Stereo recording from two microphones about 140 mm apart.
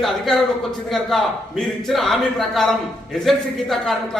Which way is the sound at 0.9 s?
Centre (ahead or behind).